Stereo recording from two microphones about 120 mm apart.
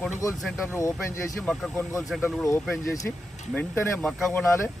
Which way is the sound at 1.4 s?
Centre (ahead or behind).